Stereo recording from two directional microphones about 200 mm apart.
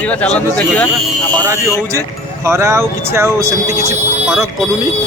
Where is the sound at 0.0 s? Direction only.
5° left (ahead or behind).